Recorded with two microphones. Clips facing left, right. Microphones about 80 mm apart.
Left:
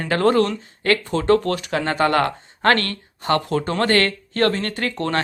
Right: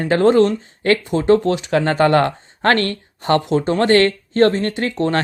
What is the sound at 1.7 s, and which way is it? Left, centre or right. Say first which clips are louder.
Speech: right 5 dB; right.